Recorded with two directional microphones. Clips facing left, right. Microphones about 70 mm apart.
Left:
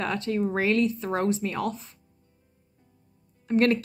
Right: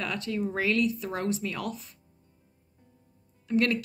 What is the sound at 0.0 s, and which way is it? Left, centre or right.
Speech, left.